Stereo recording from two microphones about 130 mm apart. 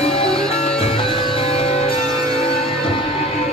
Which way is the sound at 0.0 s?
45° left (ahead or behind).